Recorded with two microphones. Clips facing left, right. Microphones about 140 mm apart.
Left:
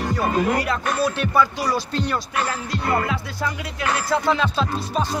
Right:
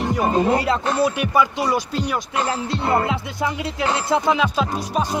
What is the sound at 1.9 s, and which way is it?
Speech, 10° right (ahead or behind).